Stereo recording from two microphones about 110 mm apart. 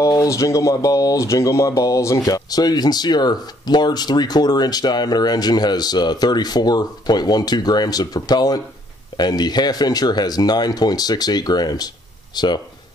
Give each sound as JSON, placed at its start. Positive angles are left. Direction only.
{"t": 0.0, "sound": "speech", "side_deg": 30}